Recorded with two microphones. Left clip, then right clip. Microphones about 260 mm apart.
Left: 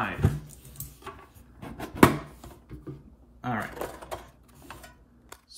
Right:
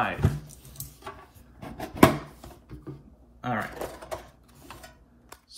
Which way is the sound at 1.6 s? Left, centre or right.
Centre.